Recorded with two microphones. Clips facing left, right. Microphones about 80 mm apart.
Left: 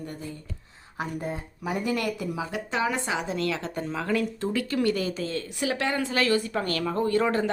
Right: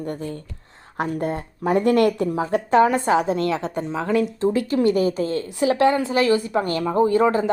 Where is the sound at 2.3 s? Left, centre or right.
Right.